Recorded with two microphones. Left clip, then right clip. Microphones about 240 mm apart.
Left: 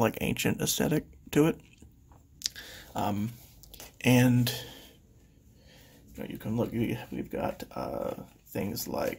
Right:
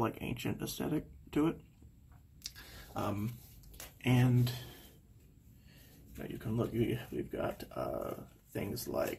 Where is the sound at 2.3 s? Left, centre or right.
Left.